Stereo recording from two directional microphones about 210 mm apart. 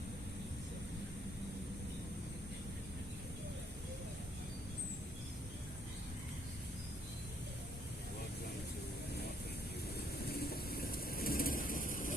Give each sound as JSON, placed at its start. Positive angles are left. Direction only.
{"t": 10.2, "sound": "vehicle", "side_deg": 45}